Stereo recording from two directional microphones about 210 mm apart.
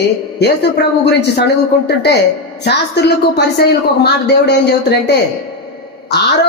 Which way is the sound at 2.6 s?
50° left (ahead or behind).